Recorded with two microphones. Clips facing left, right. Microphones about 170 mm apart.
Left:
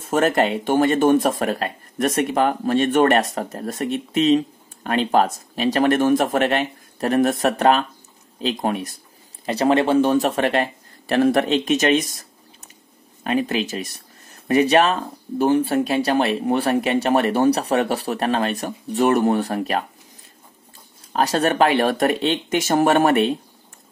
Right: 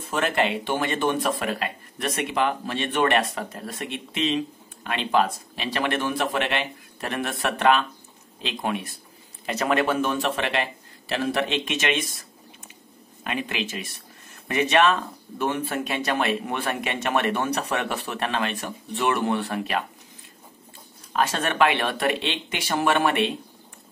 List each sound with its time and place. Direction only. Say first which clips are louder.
0.0 s speech: left 6 dB; 45° left (ahead or behind)
21.1 s speech: left 6 dB; 40° left (ahead or behind)